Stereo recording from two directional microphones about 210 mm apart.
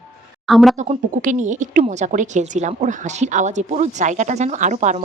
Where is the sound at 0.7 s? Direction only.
35° right (ahead or behind).